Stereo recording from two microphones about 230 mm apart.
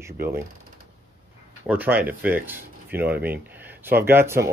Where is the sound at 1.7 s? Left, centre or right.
Centre.